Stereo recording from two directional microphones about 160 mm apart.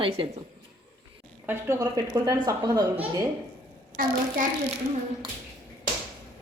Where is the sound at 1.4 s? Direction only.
15° right (ahead or behind).